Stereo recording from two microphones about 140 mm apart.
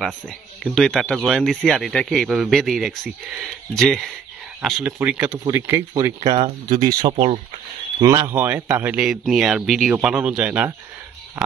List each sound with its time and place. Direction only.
0.7 s a man's voice: 5° left (ahead or behind); by 6.3 s 25° right (ahead or behind)
6.3 s a man's voice: 35° right (ahead or behind); by 11.5 s 10° right (ahead or behind)